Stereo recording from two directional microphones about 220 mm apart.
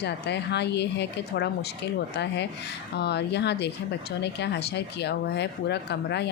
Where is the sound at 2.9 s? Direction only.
50° left (ahead or behind).